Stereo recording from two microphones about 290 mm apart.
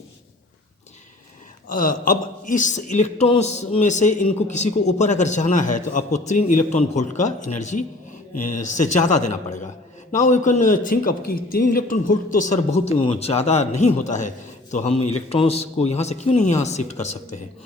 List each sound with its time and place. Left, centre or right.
1.7 s speech: left